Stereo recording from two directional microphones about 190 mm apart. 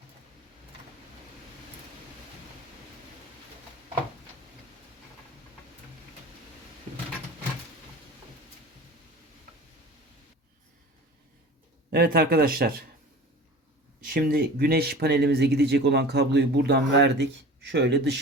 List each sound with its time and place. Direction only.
11.9 s speech: 55° right (ahead or behind)
14.0 s speech: 50° right (ahead or behind)